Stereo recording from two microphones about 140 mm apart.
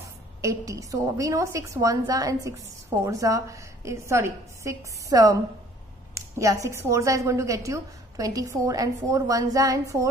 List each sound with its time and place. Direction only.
0.4 s a woman's voice: 20° right (ahead or behind)